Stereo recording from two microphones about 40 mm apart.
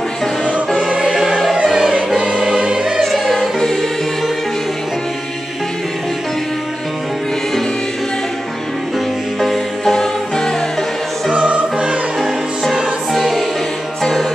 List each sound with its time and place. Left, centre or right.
0.8 s music: centre
2.4 s choir: centre
3.0 s music: centre
3.3 s music: centre
9.4 s music: centre
11.3 s music: right
12.2 s music: centre